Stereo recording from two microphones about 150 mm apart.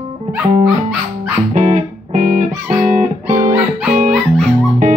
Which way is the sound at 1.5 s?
60° right (ahead or behind).